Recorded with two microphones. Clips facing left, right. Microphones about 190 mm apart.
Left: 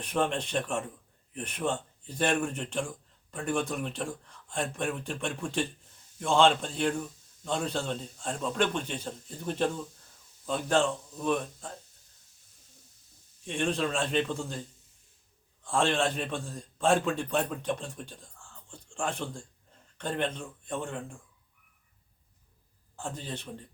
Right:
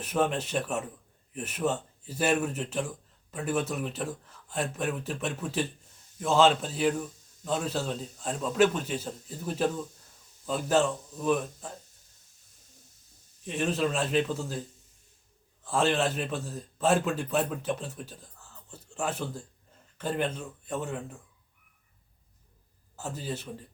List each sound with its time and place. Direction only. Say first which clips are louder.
0.0 s a man's voice: right 2 dB; 5° right (ahead or behind)
13.4 s a man's voice: right 1 dB; 5° right (ahead or behind)
15.6 s a man's voice: right 1 dB; 5° right (ahead or behind)
23.0 s a man's voice: right 2 dB; 5° right (ahead or behind)